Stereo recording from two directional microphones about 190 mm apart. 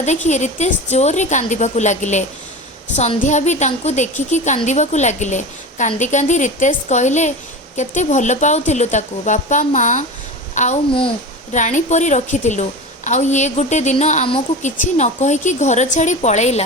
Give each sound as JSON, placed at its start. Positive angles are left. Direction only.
{"t": 0.0, "sound": "a woman's voice", "side_deg": 35}